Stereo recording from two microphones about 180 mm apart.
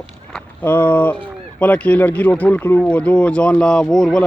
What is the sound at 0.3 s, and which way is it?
A man's voice, 10° left (ahead or behind).